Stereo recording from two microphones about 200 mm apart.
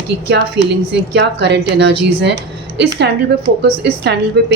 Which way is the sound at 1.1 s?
60° right (ahead or behind).